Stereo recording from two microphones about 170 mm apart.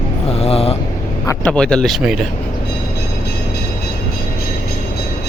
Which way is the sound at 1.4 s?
5° left (ahead or behind).